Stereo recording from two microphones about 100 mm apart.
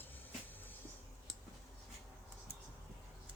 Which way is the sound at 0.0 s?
20° left (ahead or behind).